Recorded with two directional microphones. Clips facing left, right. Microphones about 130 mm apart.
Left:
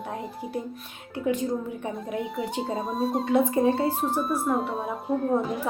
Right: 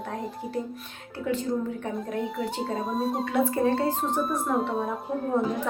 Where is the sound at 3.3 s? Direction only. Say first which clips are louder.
Left 3 dB; 20° left (ahead or behind).